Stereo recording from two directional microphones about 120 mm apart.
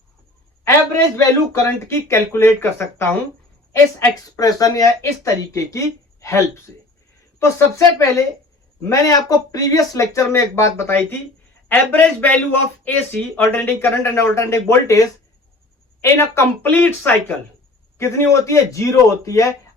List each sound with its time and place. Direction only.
1.1 s speech: 25° left (ahead or behind)
8.8 s speech: 30° left (ahead or behind)